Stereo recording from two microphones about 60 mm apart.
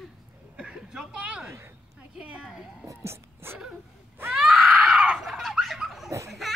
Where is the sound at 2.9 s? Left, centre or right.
Right.